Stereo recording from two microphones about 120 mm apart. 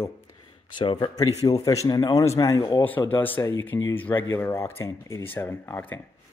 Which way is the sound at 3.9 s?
15° left (ahead or behind).